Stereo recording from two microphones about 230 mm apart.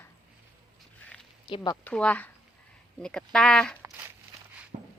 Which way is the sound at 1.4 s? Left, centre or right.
Centre.